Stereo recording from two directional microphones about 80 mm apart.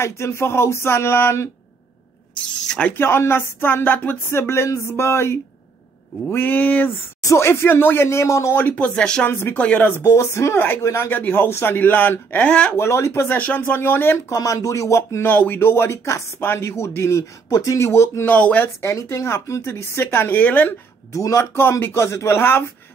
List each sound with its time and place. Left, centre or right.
0.0 s speech: left
3.0 s speech: left
7.2 s speech: left
8.5 s speech: left
9.3 s speech: left
9.6 s speech: centre
12.7 s speech: left
13.4 s speech: left
14.3 s speech: left
15.2 s speech: left
18.2 s speech: left
18.8 s speech: left
21.1 s speech: left